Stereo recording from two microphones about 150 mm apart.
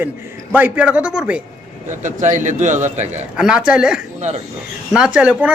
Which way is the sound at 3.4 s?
5° right (ahead or behind).